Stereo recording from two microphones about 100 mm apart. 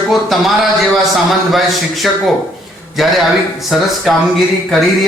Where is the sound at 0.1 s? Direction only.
Centre (ahead or behind).